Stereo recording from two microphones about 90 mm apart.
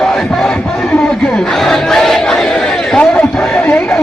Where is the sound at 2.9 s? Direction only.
15° left (ahead or behind).